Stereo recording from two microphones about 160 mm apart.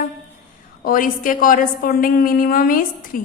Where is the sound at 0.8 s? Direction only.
60° left (ahead or behind).